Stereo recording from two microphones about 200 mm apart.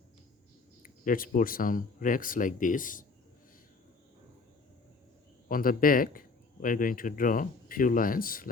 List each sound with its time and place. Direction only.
0.8 s speech: 45° left (ahead or behind)
5.5 s speech: 45° left (ahead or behind)